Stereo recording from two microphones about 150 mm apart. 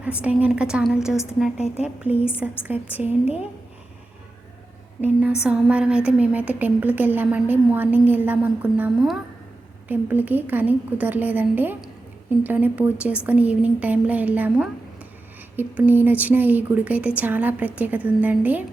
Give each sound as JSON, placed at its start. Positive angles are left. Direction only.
{"t": 0.0, "sound": "a woman's voice", "side_deg": -10}
{"t": 1.1, "sound": "a woman's voice", "side_deg": 20}
{"t": 1.7, "sound": "a woman's voice", "side_deg": -5}
{"t": 5.4, "sound": "a woman's voice", "side_deg": -5}